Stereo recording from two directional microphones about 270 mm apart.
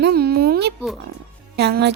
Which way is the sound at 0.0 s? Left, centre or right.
Right.